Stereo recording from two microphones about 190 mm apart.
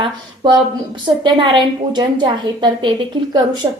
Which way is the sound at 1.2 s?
25° right (ahead or behind).